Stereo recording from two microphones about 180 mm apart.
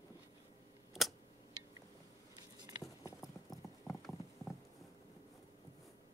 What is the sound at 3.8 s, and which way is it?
Clip-clop, 5° left (ahead or behind).